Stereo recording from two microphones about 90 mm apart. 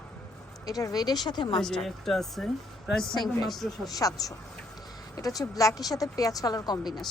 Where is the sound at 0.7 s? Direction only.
45° left (ahead or behind).